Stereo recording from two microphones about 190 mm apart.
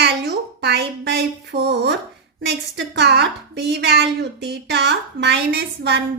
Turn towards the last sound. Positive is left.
turn(degrees=-60)  # may be behind; listen again after turning